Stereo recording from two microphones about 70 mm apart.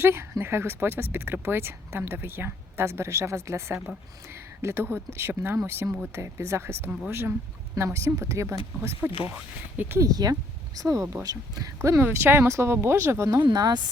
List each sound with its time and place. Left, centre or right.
0.0 s speech: right
6.1 s speech: right
7.8 s speech: right
10.0 s speech: right
10.8 s speech: right
13.5 s a woman's voice: right